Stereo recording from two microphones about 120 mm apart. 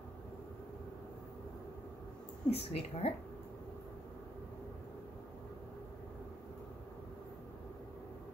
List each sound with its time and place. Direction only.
2.5 s a woman's voice: 60° left (ahead or behind)